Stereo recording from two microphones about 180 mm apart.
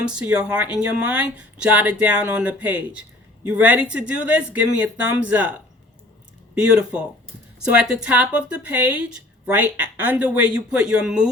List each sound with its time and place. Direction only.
0.0 s speech: 5° right (ahead or behind)